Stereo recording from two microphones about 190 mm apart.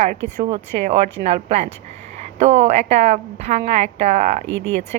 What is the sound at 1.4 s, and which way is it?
A woman's voice, 35° right (ahead or behind).